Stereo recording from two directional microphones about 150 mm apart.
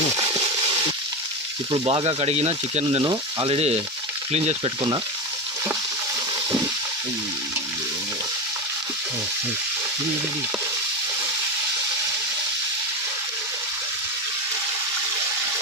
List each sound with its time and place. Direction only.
1.7 s speech: 35° right (ahead or behind)
3.0 s speech: 30° right (ahead or behind)
3.5 s speech: 45° right (ahead or behind)